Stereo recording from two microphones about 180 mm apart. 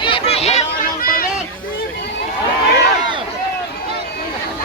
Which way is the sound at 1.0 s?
50° left (ahead or behind).